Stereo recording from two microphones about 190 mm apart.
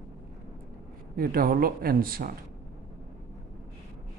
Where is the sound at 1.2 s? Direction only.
50° right (ahead or behind).